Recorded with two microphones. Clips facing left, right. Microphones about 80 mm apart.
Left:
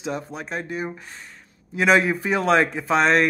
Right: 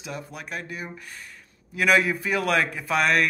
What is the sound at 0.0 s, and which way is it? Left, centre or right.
Speech, left.